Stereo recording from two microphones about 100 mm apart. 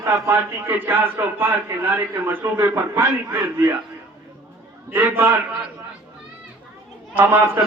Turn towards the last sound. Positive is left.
turn(degrees=-20)  # may be behind; listen again after turning